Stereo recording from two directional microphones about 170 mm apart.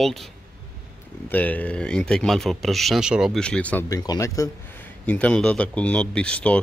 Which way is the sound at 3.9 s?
20° left (ahead or behind).